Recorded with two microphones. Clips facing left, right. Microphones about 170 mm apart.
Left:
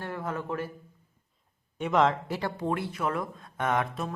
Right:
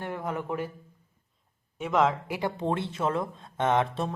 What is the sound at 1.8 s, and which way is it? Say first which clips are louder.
Speech: even; centre (ahead or behind).